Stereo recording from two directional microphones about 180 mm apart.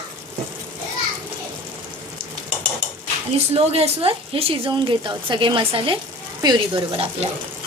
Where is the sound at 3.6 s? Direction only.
35° right (ahead or behind).